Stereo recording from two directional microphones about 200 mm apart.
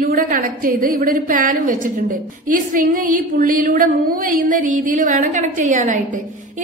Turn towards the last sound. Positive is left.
turn(degrees=-40)  # may be behind; listen again after turning